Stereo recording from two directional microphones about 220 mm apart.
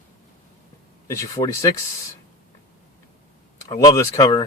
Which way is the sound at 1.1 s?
15° left (ahead or behind).